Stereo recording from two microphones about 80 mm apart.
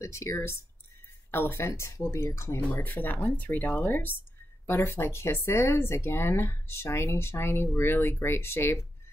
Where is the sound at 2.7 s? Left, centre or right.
Left.